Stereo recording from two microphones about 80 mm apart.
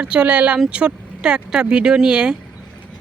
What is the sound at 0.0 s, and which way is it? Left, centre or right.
Speech, centre.